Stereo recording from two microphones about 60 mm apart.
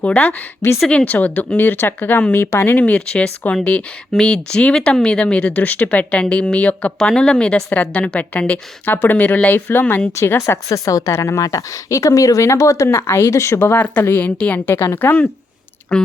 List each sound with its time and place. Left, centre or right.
0.0 s speech: left
10.2 s speech: left
14.0 s speech: left
14.6 s speech: left